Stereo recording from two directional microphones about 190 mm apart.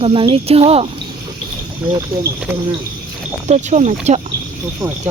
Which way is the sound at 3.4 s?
35° right (ahead or behind).